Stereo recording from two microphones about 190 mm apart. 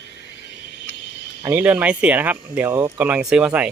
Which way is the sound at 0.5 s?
70° left (ahead or behind).